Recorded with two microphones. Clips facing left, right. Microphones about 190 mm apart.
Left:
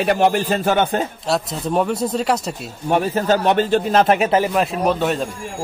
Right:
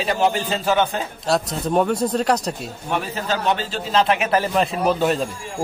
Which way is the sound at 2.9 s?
45° left (ahead or behind).